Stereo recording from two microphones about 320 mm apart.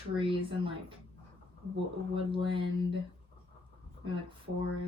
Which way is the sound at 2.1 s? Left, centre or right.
Centre.